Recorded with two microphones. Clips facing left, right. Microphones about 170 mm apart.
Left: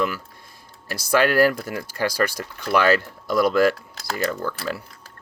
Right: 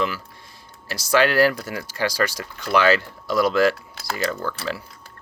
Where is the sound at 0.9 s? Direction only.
50° left (ahead or behind).